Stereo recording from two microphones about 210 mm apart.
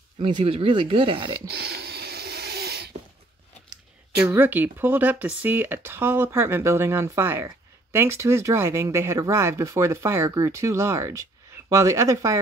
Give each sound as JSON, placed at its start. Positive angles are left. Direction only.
{"t": 0.2, "sound": "speech", "side_deg": -25}
{"t": 1.5, "sound": "a sound", "side_deg": -50}
{"t": 4.3, "sound": "speech", "side_deg": -10}